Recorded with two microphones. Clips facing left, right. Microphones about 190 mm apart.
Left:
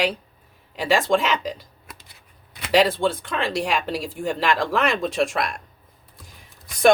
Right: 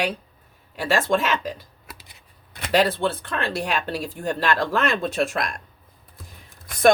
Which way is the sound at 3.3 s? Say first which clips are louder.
Left 2 dB; 90° left.